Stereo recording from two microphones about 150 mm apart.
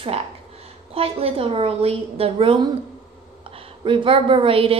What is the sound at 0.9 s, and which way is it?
A woman's voice, 40° right (ahead or behind).